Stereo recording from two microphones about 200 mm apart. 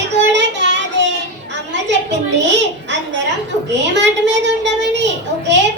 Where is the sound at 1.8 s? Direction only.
60° right (ahead or behind).